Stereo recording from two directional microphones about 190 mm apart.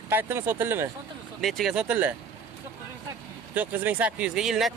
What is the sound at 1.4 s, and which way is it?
Speech, centre (ahead or behind).